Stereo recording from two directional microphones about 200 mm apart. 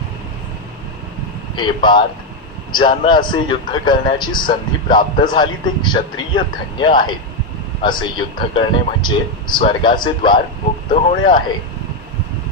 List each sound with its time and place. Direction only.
1.5 s a man's voice: 25° left (ahead or behind)